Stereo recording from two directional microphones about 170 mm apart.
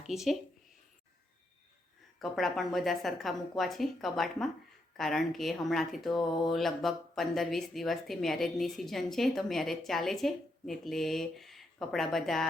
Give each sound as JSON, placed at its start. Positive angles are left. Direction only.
{"t": 0.1, "sound": "speech", "side_deg": 0}
{"t": 2.1, "sound": "speech", "side_deg": 0}